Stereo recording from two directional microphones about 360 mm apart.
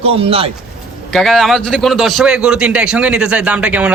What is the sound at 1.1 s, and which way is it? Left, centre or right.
A man's voice, centre.